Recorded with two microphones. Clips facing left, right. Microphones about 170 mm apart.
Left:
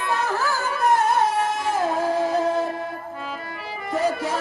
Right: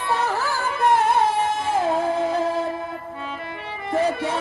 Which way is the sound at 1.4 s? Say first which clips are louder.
Right 1 dB; 25° right (ahead or behind).